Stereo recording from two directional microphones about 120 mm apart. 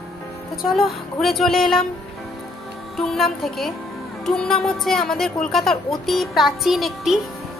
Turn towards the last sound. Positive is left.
turn(degrees=0)  # may be behind; listen again after turning